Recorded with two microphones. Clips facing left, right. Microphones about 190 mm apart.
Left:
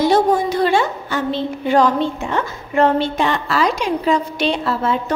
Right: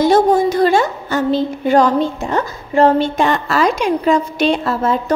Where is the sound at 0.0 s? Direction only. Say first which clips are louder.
Right 3 dB; 45° right (ahead or behind).